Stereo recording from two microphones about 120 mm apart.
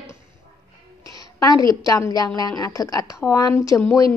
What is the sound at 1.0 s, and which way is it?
A woman's voice, 30° left (ahead or behind).